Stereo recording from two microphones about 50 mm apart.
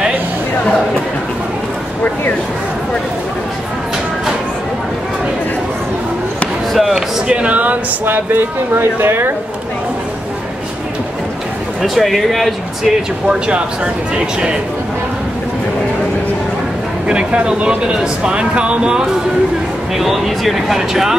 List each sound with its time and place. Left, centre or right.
6.7 s basketball bounce: centre
7.2 s a sound: right
8.0 s speech: right
11.8 s speech: centre
13.3 s speech: right
17.1 s speech: right
20.0 s speech: centre